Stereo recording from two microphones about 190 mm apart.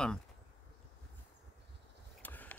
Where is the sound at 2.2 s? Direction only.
10° left (ahead or behind).